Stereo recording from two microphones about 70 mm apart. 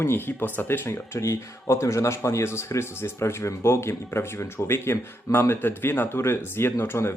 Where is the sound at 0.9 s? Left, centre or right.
Left.